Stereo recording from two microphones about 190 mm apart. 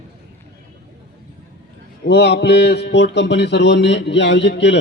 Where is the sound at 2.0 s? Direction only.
60° left (ahead or behind).